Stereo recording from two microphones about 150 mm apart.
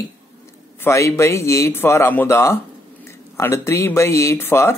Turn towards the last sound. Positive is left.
turn(degrees=15)  # may be behind; listen again after turning